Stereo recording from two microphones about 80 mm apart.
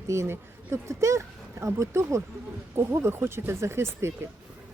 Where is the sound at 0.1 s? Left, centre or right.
Right.